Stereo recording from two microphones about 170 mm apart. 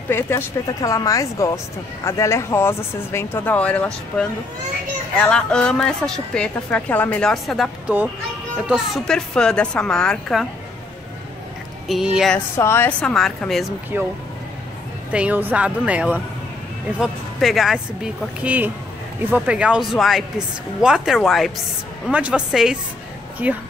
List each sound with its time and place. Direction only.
0.1 s a woman's voice: 15° left (ahead or behind)
11.9 s a woman's voice: 5° right (ahead or behind)
12.5 s speech: 15° left (ahead or behind)
13.9 s a woman's voice: 10° right (ahead or behind)
15.1 s a woman's voice: 10° right (ahead or behind)